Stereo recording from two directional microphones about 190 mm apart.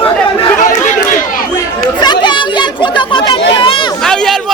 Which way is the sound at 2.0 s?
25° left (ahead or behind).